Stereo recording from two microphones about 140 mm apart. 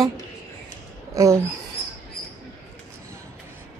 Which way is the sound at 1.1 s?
20° right (ahead or behind).